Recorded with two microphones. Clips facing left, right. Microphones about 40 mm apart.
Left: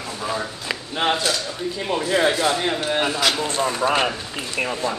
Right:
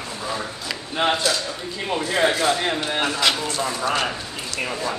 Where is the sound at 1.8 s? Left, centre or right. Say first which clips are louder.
Left 1 dB; centre.